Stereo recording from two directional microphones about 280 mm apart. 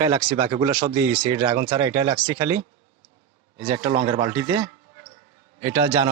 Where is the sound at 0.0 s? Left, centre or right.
Centre.